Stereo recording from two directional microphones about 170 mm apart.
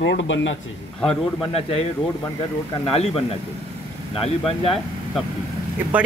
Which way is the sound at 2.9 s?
35° left (ahead or behind).